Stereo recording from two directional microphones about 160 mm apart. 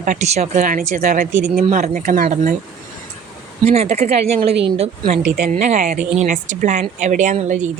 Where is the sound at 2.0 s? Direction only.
65° right (ahead or behind).